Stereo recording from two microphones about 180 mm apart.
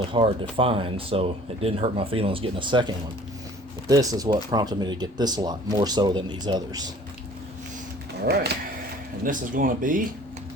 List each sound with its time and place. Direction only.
0.0 s speech: 30° right (ahead or behind)
8.2 s speech: 65° right (ahead or behind)
9.2 s speech: 50° right (ahead or behind)